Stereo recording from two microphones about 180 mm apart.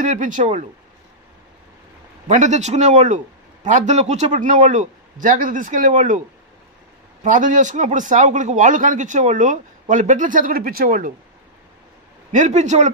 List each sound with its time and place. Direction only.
0.0 s a man's voice: 45° right (ahead or behind)
2.2 s a man's voice: 40° right (ahead or behind)
7.2 s a man's voice: 45° right (ahead or behind)
12.3 s a man's voice: 40° right (ahead or behind)